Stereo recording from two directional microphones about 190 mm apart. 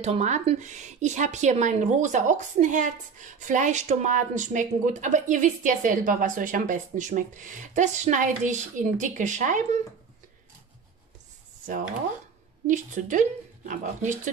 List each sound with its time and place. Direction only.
0.0 s a woman's voice: 35° right (ahead or behind)
12.6 s a woman's voice: 40° right (ahead or behind)